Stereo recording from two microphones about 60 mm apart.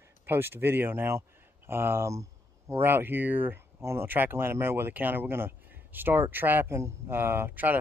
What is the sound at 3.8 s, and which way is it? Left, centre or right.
Speech, right.